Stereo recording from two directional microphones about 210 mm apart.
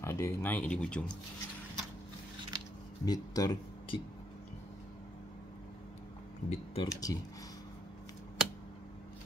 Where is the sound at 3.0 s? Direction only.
20° left (ahead or behind).